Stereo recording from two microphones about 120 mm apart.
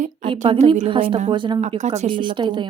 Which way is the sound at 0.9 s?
45° right (ahead or behind).